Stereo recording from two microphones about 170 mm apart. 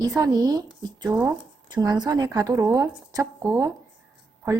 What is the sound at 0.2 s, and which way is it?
Speech, 20° right (ahead or behind).